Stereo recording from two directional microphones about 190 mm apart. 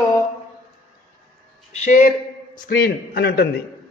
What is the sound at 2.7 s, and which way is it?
Speech, 50° left (ahead or behind).